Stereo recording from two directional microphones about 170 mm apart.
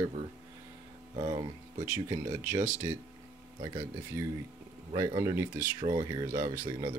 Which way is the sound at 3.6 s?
20° right (ahead or behind).